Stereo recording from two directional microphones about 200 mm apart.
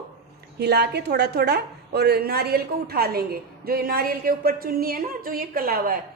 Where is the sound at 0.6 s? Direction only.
55° right (ahead or behind).